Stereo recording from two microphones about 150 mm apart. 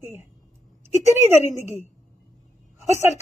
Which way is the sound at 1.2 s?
15° right (ahead or behind).